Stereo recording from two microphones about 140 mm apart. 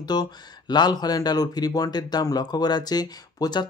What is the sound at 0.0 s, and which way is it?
Speech, 30° left (ahead or behind).